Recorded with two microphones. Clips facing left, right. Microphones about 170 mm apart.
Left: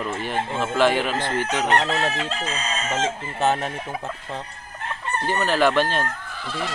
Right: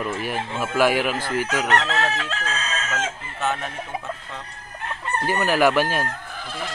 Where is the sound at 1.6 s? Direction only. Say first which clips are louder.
Left 1 dB; 15° left (ahead or behind).